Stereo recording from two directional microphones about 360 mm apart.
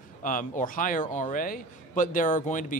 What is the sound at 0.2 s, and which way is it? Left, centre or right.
A man's voice, left.